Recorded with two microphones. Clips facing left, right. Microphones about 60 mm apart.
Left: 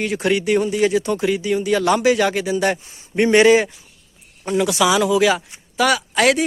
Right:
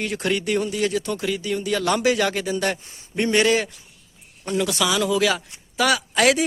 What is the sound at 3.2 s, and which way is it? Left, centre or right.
Speech, centre.